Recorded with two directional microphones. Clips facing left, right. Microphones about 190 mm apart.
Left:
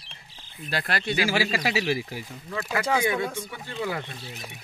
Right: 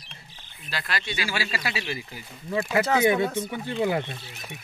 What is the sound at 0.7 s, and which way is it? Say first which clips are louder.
Speech: left 5 dB; 55° left (ahead or behind).